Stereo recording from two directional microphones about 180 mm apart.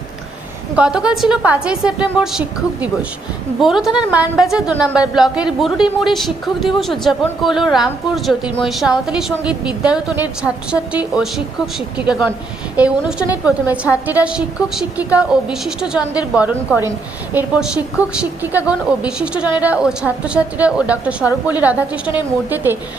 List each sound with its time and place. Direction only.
0.8 s a woman's voice: 5° right (ahead or behind)
3.6 s a woman's voice: centre (ahead or behind)